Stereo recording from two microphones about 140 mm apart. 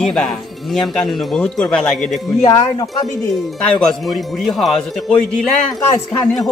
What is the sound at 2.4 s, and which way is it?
Speech, 30° left (ahead or behind).